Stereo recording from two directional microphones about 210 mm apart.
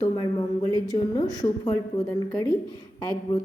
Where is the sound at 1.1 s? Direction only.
20° left (ahead or behind).